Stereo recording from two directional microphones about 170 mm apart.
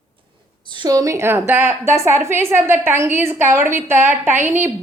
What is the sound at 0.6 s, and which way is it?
A woman's voice, 25° right (ahead or behind).